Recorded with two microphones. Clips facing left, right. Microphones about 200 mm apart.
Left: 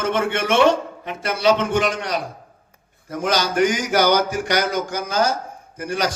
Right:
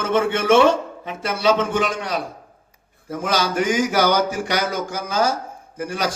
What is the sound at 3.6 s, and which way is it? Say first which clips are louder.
A man's voice: left 1 dB; 5° right (ahead or behind).